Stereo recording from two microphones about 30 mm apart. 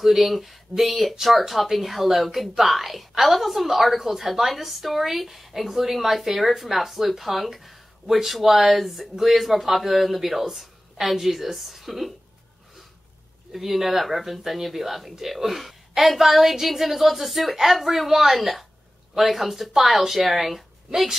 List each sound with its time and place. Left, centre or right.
0.0 s a woman's voice: centre
13.5 s speech: centre
16.0 s a woman's voice: right
16.3 s a woman's voice: centre